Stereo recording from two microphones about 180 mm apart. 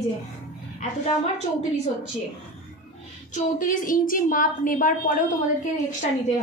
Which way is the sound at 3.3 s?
50° left (ahead or behind).